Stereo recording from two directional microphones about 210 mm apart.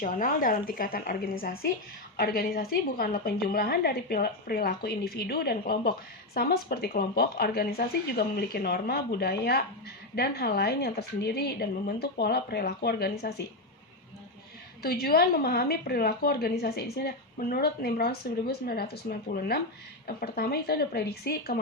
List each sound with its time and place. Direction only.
0.0 s a woman's voice: 40° left (ahead or behind)
14.8 s a woman's voice: 45° left (ahead or behind)